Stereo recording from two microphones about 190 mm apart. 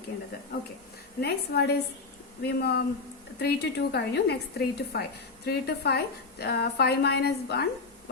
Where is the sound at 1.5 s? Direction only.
55° left (ahead or behind).